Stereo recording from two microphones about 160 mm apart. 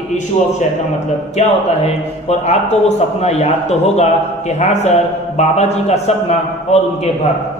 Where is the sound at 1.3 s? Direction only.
40° left (ahead or behind).